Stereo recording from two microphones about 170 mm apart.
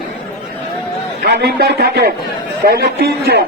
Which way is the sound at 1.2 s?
70° right (ahead or behind).